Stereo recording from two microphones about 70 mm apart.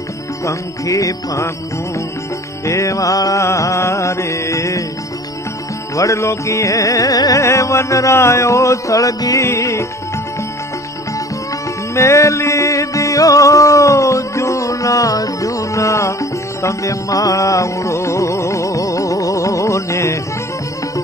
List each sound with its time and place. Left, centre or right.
0.5 s music: left
2.6 s music: left
5.9 s music: left
7.4 s music: left
11.9 s music: left